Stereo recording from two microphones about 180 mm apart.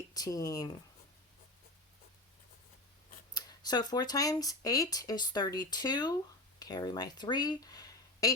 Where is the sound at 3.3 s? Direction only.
20° left (ahead or behind).